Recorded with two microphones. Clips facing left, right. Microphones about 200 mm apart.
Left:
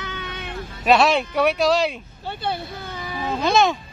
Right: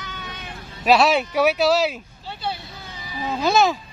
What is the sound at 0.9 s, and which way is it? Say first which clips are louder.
Speech: even; centre (ahead or behind).